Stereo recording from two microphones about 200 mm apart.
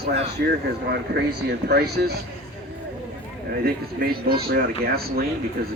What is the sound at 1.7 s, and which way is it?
Speech, 55° right (ahead or behind).